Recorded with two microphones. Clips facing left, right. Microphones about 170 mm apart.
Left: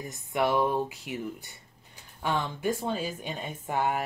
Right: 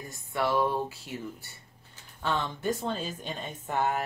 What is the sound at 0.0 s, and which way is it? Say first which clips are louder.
Speech: left 3 dB; 20° left (ahead or behind).